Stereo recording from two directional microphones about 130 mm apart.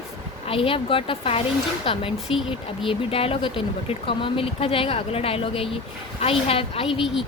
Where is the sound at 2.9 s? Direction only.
45° left (ahead or behind).